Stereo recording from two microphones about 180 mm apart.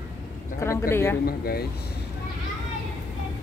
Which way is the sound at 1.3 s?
60° left (ahead or behind).